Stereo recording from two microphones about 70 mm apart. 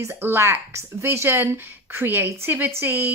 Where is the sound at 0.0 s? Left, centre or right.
Right.